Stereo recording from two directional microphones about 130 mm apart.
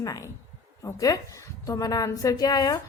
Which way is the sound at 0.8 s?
25° left (ahead or behind).